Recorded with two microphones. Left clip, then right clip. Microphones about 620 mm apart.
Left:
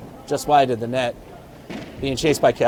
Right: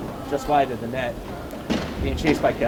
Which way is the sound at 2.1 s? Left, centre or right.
Left.